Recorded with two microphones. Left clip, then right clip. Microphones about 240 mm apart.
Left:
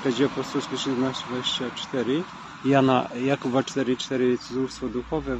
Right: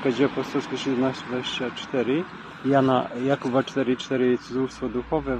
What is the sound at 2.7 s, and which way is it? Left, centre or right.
Speech, centre.